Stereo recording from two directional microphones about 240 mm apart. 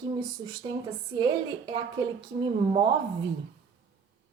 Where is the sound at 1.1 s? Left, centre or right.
Centre.